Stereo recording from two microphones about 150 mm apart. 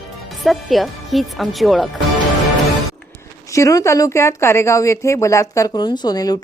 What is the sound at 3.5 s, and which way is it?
Speech, 20° left (ahead or behind).